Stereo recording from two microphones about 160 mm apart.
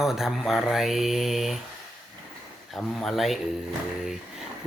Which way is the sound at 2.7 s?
Centre (ahead or behind).